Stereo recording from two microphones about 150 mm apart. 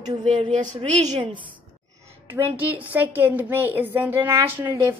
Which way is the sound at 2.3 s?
15° right (ahead or behind).